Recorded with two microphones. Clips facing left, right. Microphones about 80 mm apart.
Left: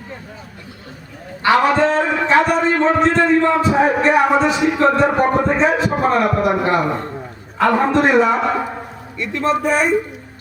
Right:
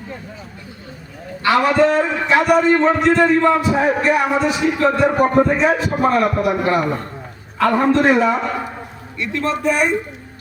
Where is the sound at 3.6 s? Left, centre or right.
Left.